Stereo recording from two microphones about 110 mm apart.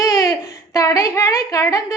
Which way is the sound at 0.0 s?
30° left (ahead or behind).